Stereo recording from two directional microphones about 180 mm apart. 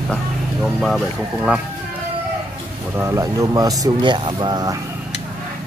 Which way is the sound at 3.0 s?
15° right (ahead or behind).